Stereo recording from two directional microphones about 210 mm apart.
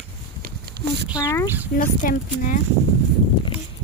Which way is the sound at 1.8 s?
40° left (ahead or behind).